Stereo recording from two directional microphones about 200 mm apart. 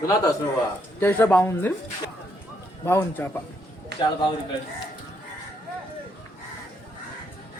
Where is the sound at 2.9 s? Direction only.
10° left (ahead or behind).